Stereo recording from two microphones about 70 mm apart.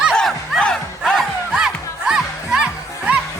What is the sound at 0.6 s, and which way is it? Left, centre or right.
Music, centre.